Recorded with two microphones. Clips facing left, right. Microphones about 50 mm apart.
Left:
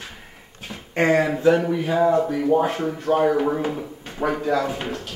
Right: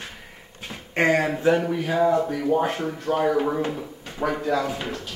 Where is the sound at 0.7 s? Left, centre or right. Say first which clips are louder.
Left 2 dB; centre.